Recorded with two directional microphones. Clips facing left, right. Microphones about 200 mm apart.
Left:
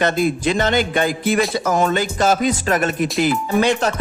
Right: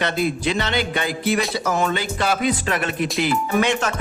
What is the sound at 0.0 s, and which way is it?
Music, 45° left (ahead or behind).